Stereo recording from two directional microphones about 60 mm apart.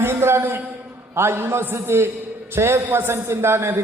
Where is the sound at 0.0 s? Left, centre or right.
Right.